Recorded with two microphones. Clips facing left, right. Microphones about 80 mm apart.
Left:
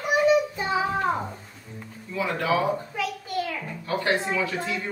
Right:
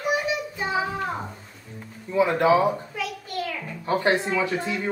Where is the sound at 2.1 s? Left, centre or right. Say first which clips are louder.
Right 6 dB; right.